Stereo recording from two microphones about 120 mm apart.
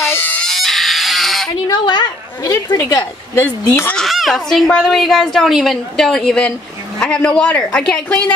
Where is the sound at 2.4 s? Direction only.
25° left (ahead or behind).